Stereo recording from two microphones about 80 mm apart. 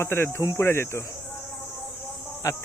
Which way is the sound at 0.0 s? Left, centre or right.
Left.